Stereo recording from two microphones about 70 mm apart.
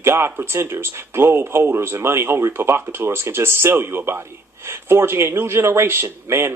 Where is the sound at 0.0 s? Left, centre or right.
Right.